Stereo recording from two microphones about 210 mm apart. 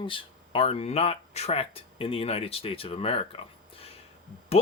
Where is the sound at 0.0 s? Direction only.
25° left (ahead or behind).